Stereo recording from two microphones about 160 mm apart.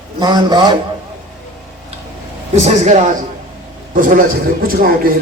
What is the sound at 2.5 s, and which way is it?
Speech, 45° right (ahead or behind).